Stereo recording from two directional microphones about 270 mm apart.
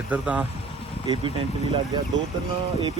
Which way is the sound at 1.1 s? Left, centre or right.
Centre.